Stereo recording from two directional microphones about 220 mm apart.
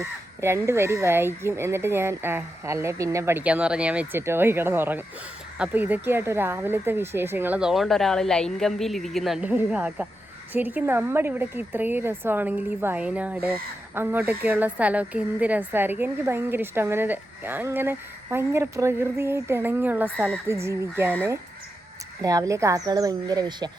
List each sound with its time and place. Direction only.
0.0 s a woman's voice: 10° right (ahead or behind)